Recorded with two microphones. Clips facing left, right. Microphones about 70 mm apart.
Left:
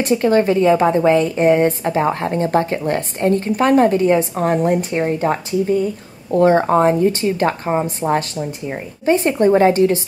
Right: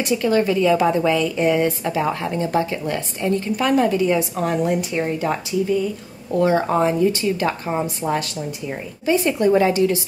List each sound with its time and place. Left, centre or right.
0.0 s a woman's voice: left